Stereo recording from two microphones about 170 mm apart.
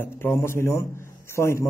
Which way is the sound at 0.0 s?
15° left (ahead or behind).